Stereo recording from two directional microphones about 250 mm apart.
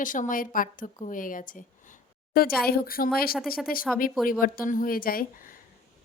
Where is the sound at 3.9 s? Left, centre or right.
Centre.